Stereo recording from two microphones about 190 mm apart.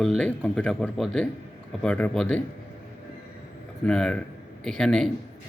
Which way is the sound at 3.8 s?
5° left (ahead or behind).